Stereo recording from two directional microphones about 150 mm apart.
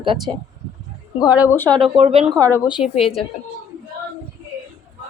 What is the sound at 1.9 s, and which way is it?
Speech, 45° right (ahead or behind).